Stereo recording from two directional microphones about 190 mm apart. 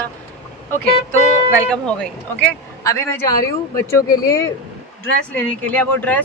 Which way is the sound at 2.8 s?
15° left (ahead or behind).